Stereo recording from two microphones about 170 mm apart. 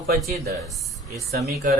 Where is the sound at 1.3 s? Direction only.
65° right (ahead or behind).